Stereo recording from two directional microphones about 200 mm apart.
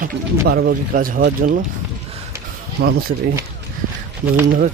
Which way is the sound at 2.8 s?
50° right (ahead or behind).